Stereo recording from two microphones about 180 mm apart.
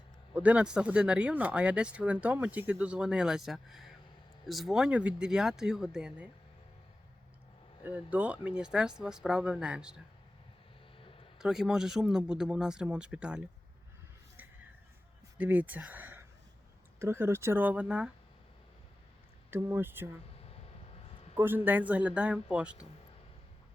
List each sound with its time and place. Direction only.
0.3 s speech: 5° right (ahead or behind)
7.9 s speech: 10° right (ahead or behind)
11.0 s a sound: 30° left (ahead or behind)
11.3 s speech: 5° right (ahead or behind)
15.4 s speech: 10° right (ahead or behind)
19.5 s speech: 10° right (ahead or behind)
20.3 s a sound: 35° left (ahead or behind)
21.3 s speech: 10° right (ahead or behind)